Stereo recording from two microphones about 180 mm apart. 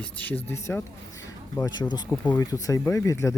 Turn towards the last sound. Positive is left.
turn(degrees=15)  # may be behind; listen again after turning